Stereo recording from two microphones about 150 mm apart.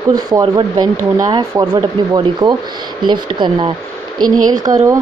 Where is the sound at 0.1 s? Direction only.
30° right (ahead or behind).